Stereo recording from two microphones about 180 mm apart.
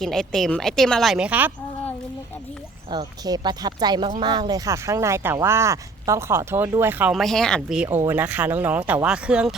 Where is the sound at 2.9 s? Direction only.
25° right (ahead or behind).